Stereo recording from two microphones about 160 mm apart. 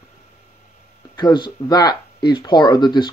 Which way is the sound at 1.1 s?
30° left (ahead or behind).